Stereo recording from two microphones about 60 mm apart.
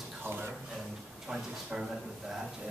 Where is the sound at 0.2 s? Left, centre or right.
Right.